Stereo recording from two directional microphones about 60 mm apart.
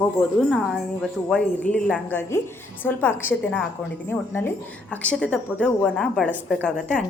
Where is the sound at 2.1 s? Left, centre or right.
Left.